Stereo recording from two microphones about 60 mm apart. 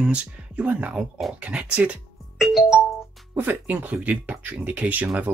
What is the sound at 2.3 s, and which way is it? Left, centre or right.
Music, centre.